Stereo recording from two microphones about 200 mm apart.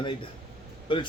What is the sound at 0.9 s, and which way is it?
Speech, 25° left (ahead or behind).